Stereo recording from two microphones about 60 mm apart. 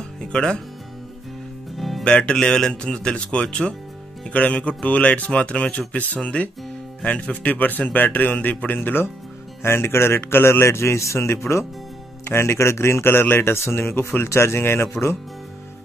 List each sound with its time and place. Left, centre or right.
0.3 s speech: centre
1.8 s music: centre
2.0 s a man's voice: centre; by 14.3 s left
14.3 s a man's voice: left